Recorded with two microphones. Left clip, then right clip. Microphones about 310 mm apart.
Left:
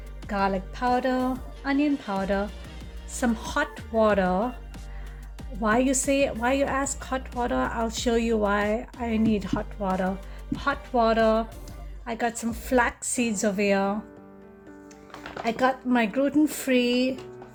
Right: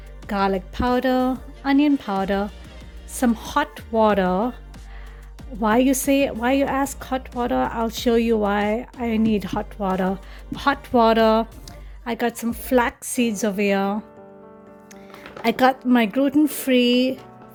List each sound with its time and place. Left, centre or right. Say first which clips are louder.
0.3 s speech: right 4 dB; right
5.5 s speech: right 4 dB; right
15.4 s speech: right 6 dB; right